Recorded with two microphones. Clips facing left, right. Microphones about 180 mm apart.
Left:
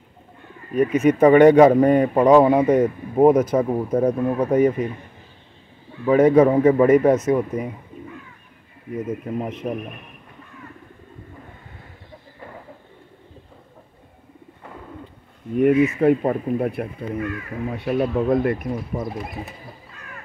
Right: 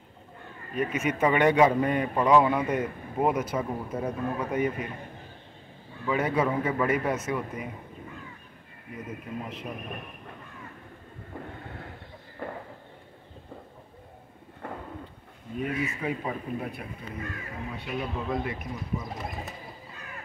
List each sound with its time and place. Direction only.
0.7 s speech: 40° left (ahead or behind)
6.0 s speech: 45° left (ahead or behind)
9.4 s speech: 45° left (ahead or behind)
15.5 s speech: 65° left (ahead or behind)